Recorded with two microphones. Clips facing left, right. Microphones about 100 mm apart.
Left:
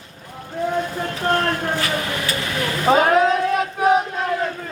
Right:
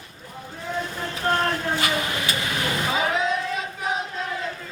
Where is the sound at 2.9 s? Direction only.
55° left (ahead or behind).